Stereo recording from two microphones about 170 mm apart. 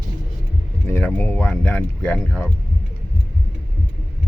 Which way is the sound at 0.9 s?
10° left (ahead or behind).